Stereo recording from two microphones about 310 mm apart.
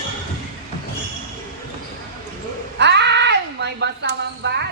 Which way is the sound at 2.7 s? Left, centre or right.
Right.